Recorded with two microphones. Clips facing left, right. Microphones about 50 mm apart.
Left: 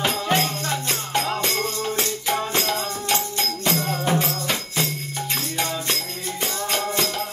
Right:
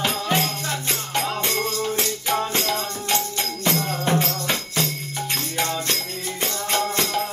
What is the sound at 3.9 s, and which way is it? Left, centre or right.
Music, centre.